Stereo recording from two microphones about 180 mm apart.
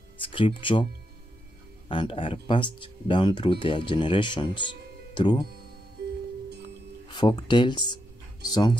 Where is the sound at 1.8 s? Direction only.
25° left (ahead or behind).